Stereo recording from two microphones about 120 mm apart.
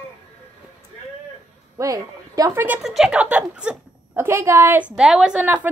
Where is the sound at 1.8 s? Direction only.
30° right (ahead or behind).